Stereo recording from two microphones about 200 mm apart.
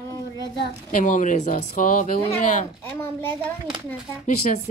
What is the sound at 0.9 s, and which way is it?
Speech, 40° left (ahead or behind).